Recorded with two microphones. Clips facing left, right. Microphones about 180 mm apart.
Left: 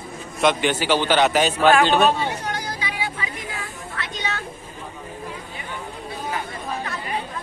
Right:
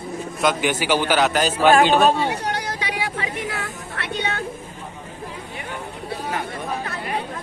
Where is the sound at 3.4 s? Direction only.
85° right; by 4.4 s 60° right (ahead or behind).